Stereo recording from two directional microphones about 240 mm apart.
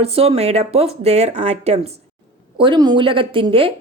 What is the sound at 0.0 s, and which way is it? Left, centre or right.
A woman's voice, right.